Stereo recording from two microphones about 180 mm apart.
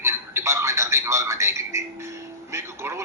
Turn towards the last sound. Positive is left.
turn(degrees=-15)  # may be behind; listen again after turning